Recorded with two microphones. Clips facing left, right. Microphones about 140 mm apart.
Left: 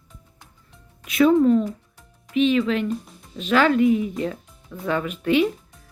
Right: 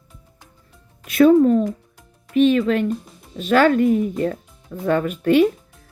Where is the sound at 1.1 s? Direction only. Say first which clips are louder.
Right 3 dB; 50° right (ahead or behind).